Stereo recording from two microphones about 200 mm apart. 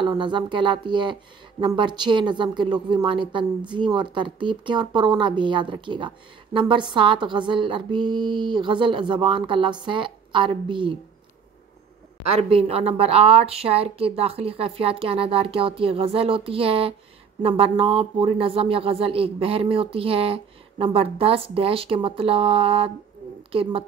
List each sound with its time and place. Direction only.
0.0 s speech: 25° right (ahead or behind)
12.3 s speech: 30° right (ahead or behind)